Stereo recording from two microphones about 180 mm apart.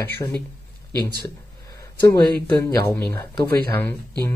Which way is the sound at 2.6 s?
15° left (ahead or behind).